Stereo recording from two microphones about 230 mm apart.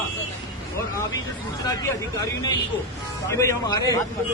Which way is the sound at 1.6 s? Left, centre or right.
Centre.